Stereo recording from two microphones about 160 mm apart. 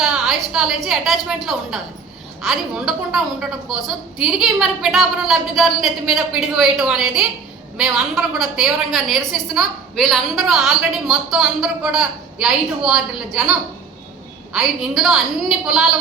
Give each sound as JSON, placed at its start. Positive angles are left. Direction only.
{"t": 0.0, "sound": "a woman's voice", "side_deg": 0}
{"t": 14.5, "sound": "a woman's voice", "side_deg": -5}